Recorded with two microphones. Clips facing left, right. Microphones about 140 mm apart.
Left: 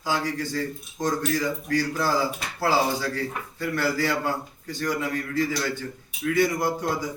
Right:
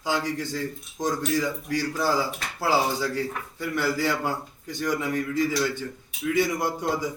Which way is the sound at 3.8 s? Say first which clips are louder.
Even; 15° right (ahead or behind).